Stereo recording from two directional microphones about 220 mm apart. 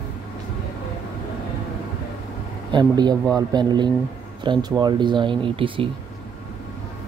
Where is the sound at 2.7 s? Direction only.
20° right (ahead or behind).